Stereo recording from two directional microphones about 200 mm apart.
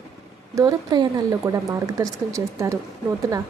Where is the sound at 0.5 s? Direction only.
15° right (ahead or behind).